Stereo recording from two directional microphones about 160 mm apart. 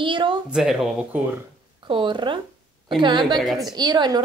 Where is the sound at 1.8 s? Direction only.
30° right (ahead or behind).